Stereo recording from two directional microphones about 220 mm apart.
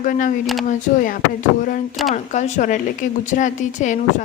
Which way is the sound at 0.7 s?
40° left (ahead or behind).